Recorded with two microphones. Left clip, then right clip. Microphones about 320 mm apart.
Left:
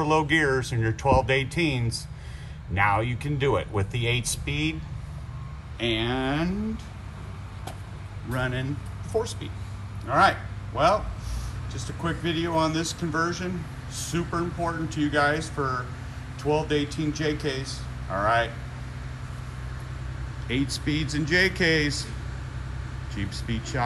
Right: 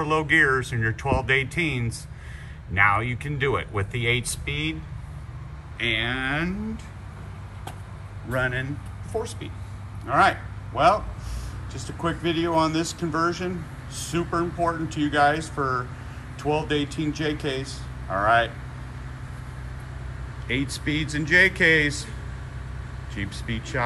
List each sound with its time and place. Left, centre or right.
0.1 s speech: centre
5.8 s speech: centre
8.3 s a man's voice: centre
20.4 s speech: centre
23.1 s speech: centre